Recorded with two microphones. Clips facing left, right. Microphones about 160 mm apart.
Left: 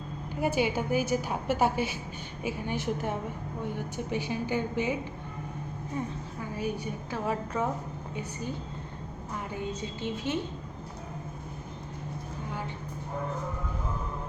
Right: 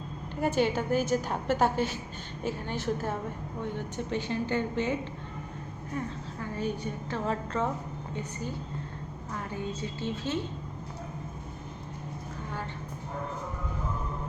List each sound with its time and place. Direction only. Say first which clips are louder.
0.3 s a woman's voice: right 1 dB; 10° left (ahead or behind)
6.4 s a woman's voice: right 1 dB; 10° left (ahead or behind)